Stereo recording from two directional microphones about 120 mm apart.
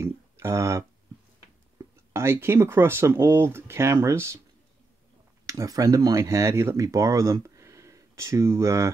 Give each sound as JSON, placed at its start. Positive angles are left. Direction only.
{"t": 0.0, "sound": "a sound", "side_deg": -25}
{"t": 2.1, "sound": "speech", "side_deg": -20}
{"t": 5.5, "sound": "speech", "side_deg": -30}